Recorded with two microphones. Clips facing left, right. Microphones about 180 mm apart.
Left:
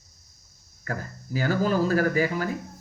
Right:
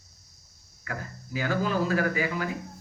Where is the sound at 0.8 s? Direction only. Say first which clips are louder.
Left 4 dB; 40° left (ahead or behind).